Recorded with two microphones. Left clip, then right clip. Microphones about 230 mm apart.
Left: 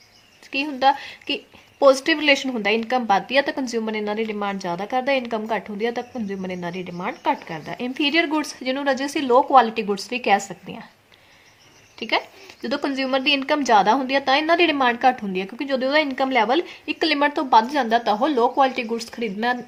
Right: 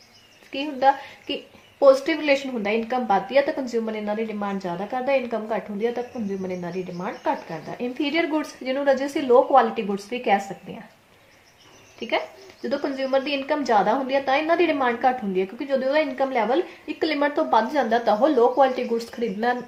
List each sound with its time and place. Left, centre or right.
0.5 s a woman's voice: left
11.9 s a woman's voice: left